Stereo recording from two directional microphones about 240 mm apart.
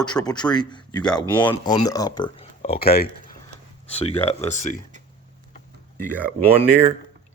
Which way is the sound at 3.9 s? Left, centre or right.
Left.